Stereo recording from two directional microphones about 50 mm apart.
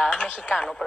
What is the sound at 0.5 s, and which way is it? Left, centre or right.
Speech, centre.